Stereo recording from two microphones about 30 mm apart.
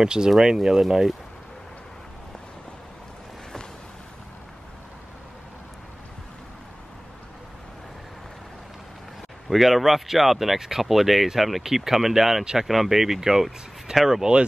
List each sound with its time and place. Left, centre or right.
0.0 s speech: right
0.5 s speech: centre
9.5 s speech: centre